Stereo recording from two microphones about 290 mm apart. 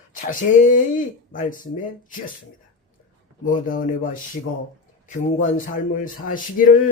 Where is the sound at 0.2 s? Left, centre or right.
Left.